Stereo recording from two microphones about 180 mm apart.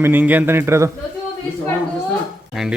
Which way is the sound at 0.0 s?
10° right (ahead or behind).